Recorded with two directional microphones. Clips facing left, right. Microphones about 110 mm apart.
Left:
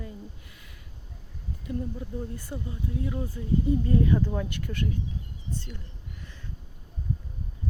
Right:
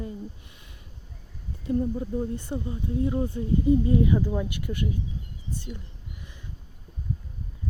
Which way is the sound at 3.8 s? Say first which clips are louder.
Right 2 dB; 15° right (ahead or behind).